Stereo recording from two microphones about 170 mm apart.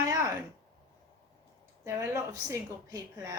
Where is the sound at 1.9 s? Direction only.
15° right (ahead or behind).